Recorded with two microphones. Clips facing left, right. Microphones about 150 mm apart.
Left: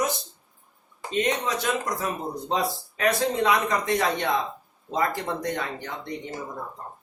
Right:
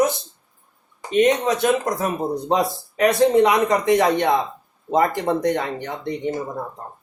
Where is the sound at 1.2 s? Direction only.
60° right (ahead or behind).